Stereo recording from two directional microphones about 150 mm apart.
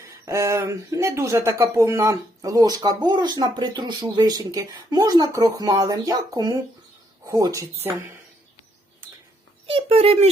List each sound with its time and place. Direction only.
0.1 s speech: 20° right (ahead or behind)
9.6 s a child's voice: 40° right (ahead or behind)